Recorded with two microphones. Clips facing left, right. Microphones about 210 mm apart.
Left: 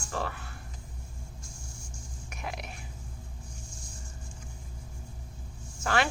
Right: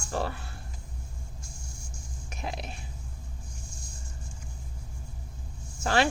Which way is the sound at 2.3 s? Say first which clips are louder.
Right 2 dB; 30° right (ahead or behind).